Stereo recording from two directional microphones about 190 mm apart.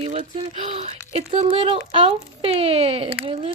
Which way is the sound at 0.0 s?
35° right (ahead or behind).